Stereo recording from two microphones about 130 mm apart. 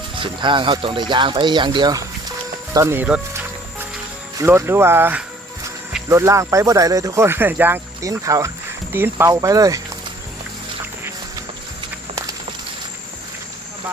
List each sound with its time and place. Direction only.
0.2 s speech: 40° right (ahead or behind)
2.7 s speech: 20° right (ahead or behind)
4.4 s speech: 20° right (ahead or behind)
8.0 s speech: 25° right (ahead or behind)